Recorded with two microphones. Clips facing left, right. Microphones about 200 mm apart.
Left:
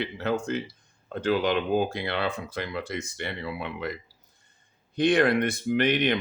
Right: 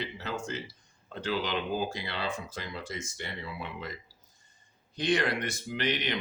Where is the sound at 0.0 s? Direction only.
60° left (ahead or behind).